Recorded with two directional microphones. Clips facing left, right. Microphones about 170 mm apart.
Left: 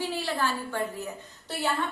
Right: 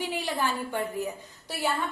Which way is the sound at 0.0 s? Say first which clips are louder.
Even; 15° right (ahead or behind).